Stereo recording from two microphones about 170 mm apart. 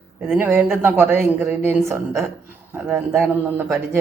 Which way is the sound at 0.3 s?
10° right (ahead or behind).